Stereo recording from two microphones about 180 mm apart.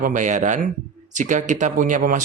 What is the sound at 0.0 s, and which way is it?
Speech, 45° right (ahead or behind).